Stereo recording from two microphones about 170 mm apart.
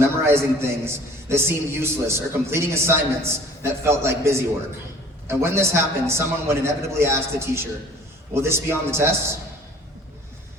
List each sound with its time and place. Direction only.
0.0 s a man's voice: 15° right (ahead or behind)